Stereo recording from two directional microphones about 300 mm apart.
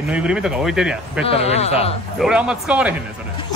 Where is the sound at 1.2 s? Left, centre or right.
Centre.